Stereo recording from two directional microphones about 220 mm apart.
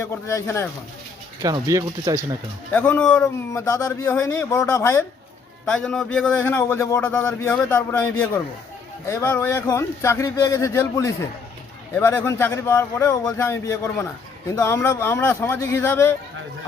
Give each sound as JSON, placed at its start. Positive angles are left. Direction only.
{"t": 0.0, "sound": "speech", "side_deg": 10}
{"t": 1.4, "sound": "speech", "side_deg": -15}
{"t": 2.7, "sound": "speech", "side_deg": 5}